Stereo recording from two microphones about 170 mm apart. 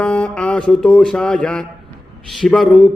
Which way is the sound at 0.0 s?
5° left (ahead or behind).